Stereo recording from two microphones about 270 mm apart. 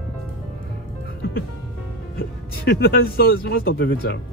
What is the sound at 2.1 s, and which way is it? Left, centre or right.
Speech, left.